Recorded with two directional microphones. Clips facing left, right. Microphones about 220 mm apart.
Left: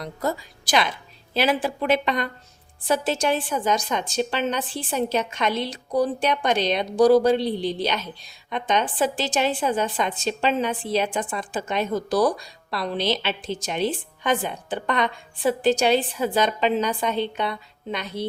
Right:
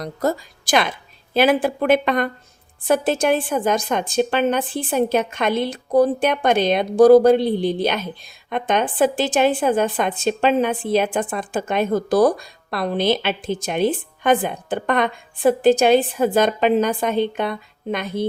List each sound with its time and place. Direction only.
0.0 s a woman's voice: 45° right (ahead or behind)